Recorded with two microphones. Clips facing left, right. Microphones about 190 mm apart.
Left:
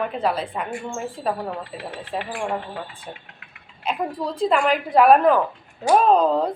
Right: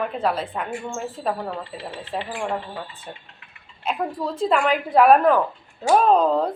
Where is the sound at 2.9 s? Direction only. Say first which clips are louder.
Left 1 dB; 60° left (ahead or behind).